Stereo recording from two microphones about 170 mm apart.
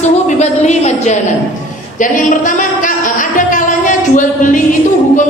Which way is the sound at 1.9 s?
50° left (ahead or behind).